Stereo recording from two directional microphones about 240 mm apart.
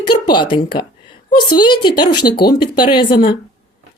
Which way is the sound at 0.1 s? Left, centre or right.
Centre.